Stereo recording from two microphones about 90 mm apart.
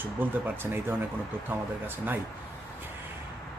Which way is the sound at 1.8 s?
20° right (ahead or behind).